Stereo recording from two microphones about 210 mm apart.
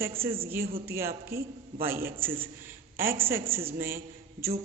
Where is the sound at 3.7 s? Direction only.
10° right (ahead or behind).